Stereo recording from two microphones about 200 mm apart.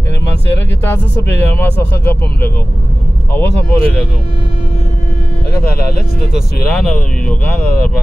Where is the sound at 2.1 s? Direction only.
10° left (ahead or behind).